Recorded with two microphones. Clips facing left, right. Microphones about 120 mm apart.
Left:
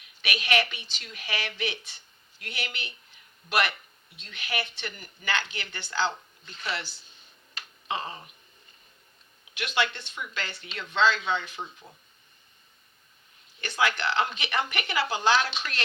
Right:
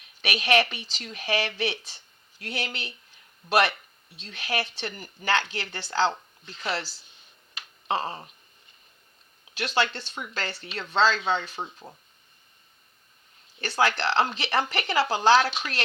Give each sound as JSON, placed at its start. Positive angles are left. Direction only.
{"t": 0.3, "sound": "speech", "side_deg": -35}
{"t": 9.6, "sound": "speech", "side_deg": -35}
{"t": 13.6, "sound": "speech", "side_deg": -35}